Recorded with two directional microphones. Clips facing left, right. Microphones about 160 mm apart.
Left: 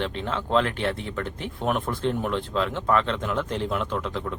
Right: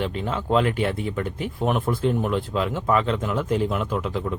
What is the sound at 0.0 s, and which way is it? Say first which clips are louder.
Speech: right 2 dB; 5° right (ahead or behind).